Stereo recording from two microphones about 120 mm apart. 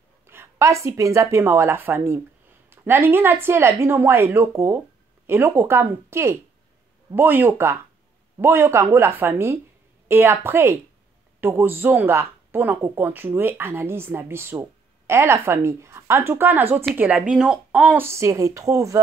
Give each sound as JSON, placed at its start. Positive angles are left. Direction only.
{"t": 0.3, "sound": "speech", "side_deg": -20}